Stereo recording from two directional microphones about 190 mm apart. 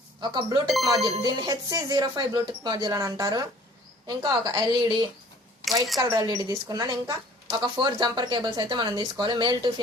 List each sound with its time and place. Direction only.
0.2 s speech: 25° right (ahead or behind)